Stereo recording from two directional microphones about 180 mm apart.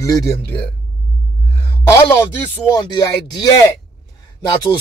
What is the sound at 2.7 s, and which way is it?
Speech, 20° left (ahead or behind).